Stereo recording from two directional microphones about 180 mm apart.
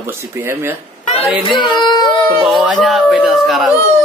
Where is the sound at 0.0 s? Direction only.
15° right (ahead or behind).